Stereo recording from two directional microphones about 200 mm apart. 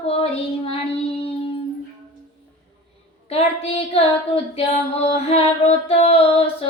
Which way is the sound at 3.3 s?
30° left (ahead or behind).